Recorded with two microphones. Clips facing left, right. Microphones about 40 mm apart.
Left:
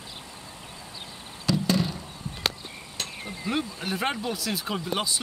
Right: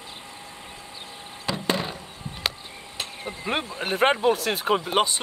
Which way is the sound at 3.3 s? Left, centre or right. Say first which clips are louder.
Right 2 dB; right.